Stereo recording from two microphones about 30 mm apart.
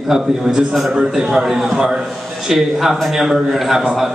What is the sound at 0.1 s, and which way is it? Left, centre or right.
A man's voice, right.